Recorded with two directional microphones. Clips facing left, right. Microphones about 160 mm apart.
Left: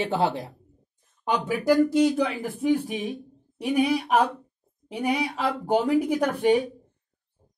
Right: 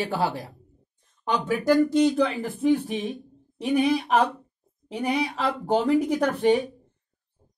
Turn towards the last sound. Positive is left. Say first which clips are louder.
# even
turn(degrees=10)  # may be behind; listen again after turning